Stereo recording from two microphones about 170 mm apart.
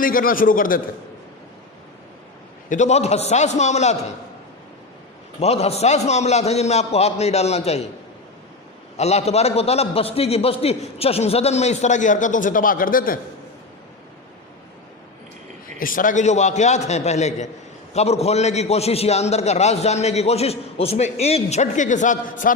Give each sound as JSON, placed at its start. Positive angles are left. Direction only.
{"t": 0.0, "sound": "a man's voice", "side_deg": 55}
{"t": 2.6, "sound": "a man's voice", "side_deg": 45}
{"t": 5.4, "sound": "a man's voice", "side_deg": 40}
{"t": 9.0, "sound": "a man's voice", "side_deg": 40}
{"t": 15.8, "sound": "a man's voice", "side_deg": 55}